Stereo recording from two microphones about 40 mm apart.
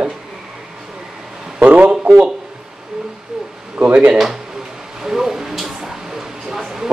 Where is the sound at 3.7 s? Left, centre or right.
Right.